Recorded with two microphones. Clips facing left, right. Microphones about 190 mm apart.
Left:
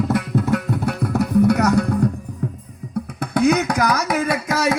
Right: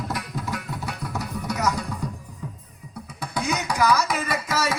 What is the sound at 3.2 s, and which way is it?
Music, 60° left (ahead or behind).